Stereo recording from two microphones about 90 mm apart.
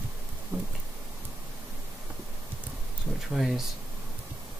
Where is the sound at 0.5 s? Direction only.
30° right (ahead or behind).